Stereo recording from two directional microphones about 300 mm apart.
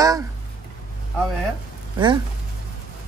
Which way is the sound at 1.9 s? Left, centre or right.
Centre.